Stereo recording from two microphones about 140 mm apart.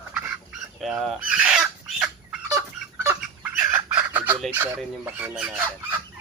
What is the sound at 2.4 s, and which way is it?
Fowl, 20° right (ahead or behind).